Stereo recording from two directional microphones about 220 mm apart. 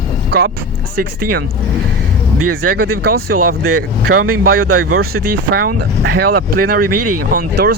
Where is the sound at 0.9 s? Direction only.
40° right (ahead or behind).